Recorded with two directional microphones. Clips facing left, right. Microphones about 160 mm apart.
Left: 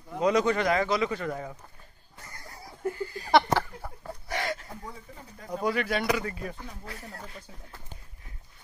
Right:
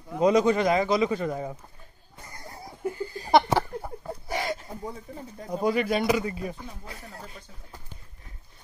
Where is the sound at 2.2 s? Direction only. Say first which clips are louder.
Right 4 dB; 20° right (ahead or behind).